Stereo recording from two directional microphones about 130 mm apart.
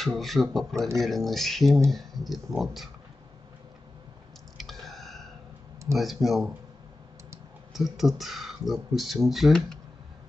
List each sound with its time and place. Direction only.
0.0 s speech: centre (ahead or behind)
4.6 s drip: centre (ahead or behind)
5.9 s speech: centre (ahead or behind)
7.7 s speech: centre (ahead or behind)